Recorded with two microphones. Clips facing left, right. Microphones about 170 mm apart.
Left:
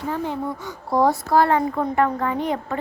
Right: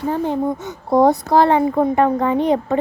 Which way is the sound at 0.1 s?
20° right (ahead or behind).